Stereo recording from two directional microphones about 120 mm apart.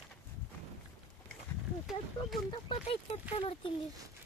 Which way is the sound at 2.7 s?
45° left (ahead or behind).